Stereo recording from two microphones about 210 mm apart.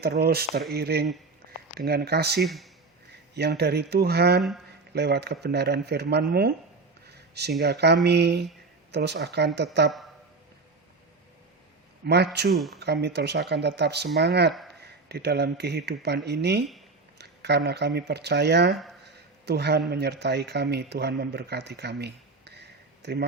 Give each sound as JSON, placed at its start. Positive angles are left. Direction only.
{"t": 0.0, "sound": "speech", "side_deg": -50}
{"t": 7.6, "sound": "speech", "side_deg": -50}
{"t": 12.0, "sound": "speech", "side_deg": -50}
{"t": 12.5, "sound": "speech", "side_deg": 0}
{"t": 12.8, "sound": "speech", "side_deg": -55}
{"t": 17.2, "sound": "a sound", "side_deg": -50}
{"t": 17.7, "sound": "speech", "side_deg": -50}
{"t": 19.0, "sound": "a sound", "side_deg": -50}
{"t": 19.9, "sound": "speech", "side_deg": -50}